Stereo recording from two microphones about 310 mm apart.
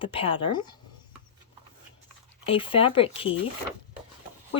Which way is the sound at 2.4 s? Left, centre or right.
Centre.